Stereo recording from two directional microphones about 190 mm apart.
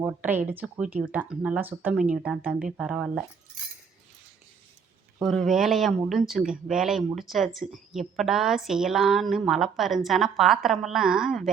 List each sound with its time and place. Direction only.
0.0 s speech: 10° right (ahead or behind)
5.2 s a woman's voice: centre (ahead or behind)